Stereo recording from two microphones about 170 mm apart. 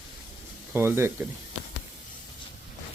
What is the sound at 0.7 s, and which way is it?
Speech, 15° right (ahead or behind).